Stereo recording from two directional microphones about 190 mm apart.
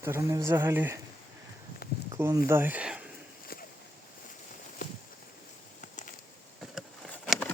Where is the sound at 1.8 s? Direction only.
55° left (ahead or behind).